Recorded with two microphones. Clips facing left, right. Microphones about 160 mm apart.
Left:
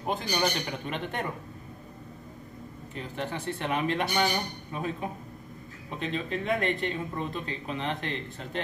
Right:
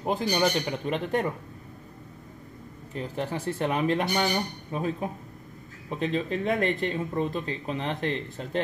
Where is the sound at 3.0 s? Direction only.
35° right (ahead or behind).